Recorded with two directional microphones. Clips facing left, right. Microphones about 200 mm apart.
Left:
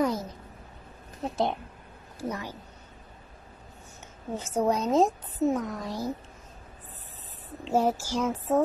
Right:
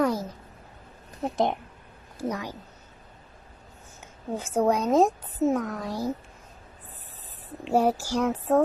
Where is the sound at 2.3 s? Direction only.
15° right (ahead or behind).